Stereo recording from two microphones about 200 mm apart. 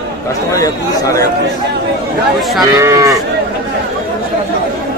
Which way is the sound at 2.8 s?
15° right (ahead or behind).